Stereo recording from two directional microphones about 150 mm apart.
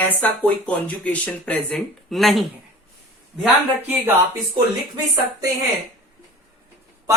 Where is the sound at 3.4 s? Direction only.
10° right (ahead or behind).